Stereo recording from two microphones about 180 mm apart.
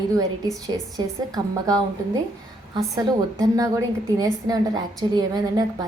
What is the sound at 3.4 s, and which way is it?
A woman's voice, 20° right (ahead or behind).